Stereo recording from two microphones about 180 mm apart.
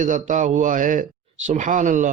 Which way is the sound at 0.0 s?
45° right (ahead or behind).